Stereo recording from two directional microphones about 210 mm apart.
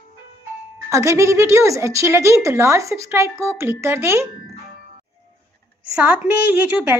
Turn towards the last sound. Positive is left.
turn(degrees=-10)  # may be behind; listen again after turning